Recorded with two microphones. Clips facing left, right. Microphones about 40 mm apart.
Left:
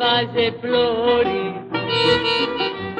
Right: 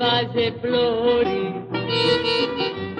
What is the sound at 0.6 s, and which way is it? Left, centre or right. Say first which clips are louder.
Music: even; centre.